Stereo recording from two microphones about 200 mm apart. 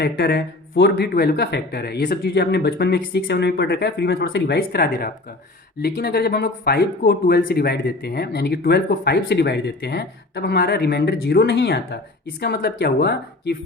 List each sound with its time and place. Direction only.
0.0 s speech: 55° left (ahead or behind)